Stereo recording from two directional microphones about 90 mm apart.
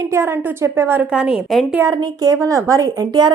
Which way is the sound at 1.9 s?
40° right (ahead or behind).